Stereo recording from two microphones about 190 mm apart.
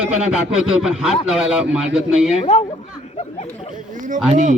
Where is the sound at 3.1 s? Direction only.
35° left (ahead or behind).